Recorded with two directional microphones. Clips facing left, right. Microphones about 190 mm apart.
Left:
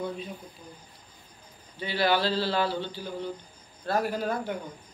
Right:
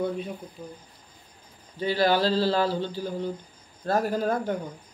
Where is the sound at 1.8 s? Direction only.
40° right (ahead or behind).